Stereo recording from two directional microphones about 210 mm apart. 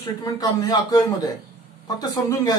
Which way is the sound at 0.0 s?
20° left (ahead or behind).